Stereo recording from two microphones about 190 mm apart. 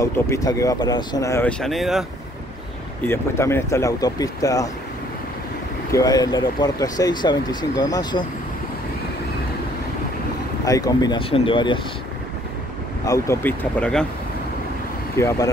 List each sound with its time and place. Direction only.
0.0 s speech: 15° left (ahead or behind)
1.6 s speech: centre (ahead or behind)
3.1 s speech: 15° left (ahead or behind)
5.9 s speech: 20° left (ahead or behind)
10.6 s speech: 20° left (ahead or behind)
13.0 s speech: 15° left (ahead or behind)
15.1 s speech: 15° left (ahead or behind)